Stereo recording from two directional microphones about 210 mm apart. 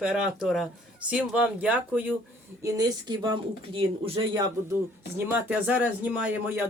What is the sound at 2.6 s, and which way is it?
Speech, 20° right (ahead or behind).